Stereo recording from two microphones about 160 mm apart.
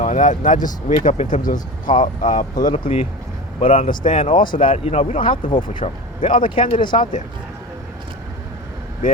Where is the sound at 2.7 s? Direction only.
35° left (ahead or behind).